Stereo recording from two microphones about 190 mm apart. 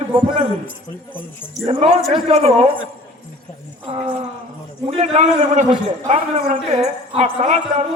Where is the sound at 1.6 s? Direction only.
30° right (ahead or behind).